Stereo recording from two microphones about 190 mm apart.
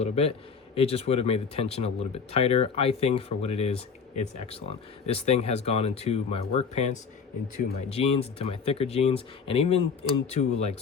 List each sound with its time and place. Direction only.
0.0 s speech: 35° left (ahead or behind)